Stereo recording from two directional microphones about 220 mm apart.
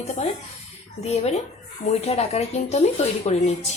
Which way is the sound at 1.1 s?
30° left (ahead or behind).